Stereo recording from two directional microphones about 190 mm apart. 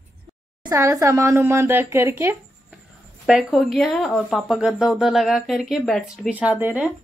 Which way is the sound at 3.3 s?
5° right (ahead or behind).